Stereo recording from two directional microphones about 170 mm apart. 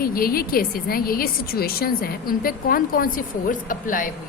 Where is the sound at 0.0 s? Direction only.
60° left (ahead or behind).